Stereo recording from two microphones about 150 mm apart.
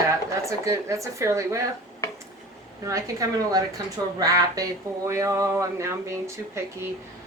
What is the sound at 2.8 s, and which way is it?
Speech, 20° right (ahead or behind).